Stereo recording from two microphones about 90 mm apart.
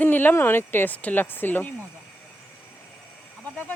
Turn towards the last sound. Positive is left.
turn(degrees=15)  # may be behind; listen again after turning